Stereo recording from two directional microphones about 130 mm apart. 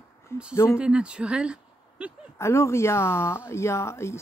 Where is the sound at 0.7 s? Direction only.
10° right (ahead or behind).